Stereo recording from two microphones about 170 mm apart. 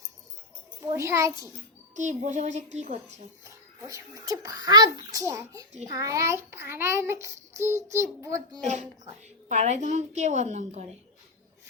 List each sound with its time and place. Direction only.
0.9 s a child's voice: 15° right (ahead or behind)
2.0 s a woman's voice: 45° right (ahead or behind)
3.4 s a child's voice: 20° right (ahead or behind)
8.6 s a woman's voice: 45° right (ahead or behind)